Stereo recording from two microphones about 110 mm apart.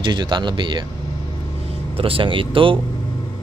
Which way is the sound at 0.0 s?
45° right (ahead or behind).